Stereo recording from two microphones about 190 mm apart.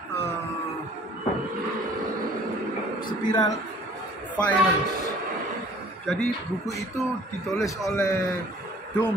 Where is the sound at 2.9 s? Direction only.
45° left (ahead or behind).